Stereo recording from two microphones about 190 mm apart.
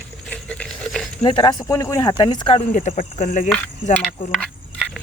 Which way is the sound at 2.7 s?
40° left (ahead or behind).